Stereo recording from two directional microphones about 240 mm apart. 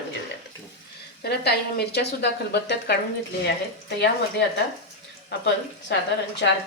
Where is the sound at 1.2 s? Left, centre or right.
Left.